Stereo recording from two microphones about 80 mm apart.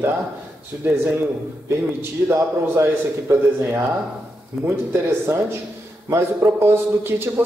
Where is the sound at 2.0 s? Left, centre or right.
Right.